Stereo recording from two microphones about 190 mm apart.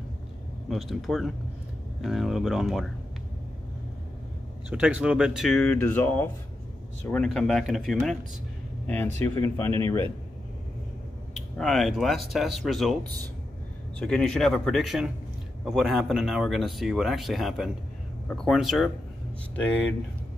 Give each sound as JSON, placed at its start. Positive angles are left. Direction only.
{"t": 0.7, "sound": "speech", "side_deg": 0}
{"t": 4.6, "sound": "speech", "side_deg": -5}
{"t": 11.3, "sound": "speech", "side_deg": 0}
{"t": 19.5, "sound": "speech", "side_deg": 10}